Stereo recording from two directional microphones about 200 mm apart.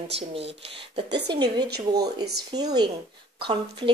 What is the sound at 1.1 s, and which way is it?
Speech, 60° right (ahead or behind).